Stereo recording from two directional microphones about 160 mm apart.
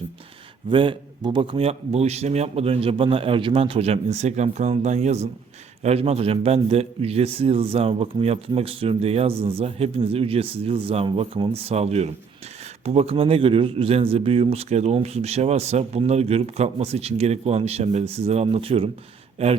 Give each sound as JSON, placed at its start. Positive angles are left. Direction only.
{"t": 0.7, "sound": "a man's voice", "side_deg": -30}